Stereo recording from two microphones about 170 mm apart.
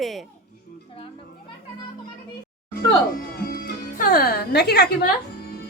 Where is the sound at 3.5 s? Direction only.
65° left (ahead or behind).